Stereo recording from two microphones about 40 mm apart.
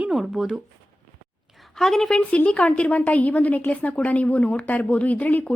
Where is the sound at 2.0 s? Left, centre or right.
Left.